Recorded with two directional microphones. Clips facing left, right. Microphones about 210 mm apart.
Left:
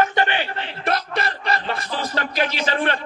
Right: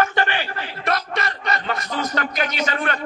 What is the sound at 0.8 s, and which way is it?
A man's voice, 30° left (ahead or behind).